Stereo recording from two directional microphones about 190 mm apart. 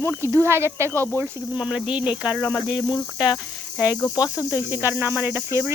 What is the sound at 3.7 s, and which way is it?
Speech, 5° right (ahead or behind).